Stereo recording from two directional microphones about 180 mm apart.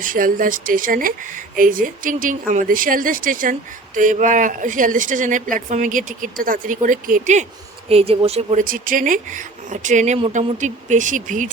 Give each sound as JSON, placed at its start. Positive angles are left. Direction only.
{"t": 0.0, "sound": "speech", "side_deg": -50}
{"t": 7.9, "sound": "speech", "side_deg": -35}